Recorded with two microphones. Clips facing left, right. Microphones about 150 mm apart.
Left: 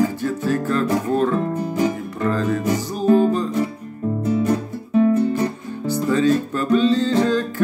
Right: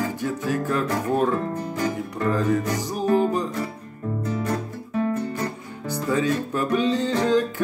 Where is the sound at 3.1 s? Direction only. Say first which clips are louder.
Left 5 dB; 15° right (ahead or behind).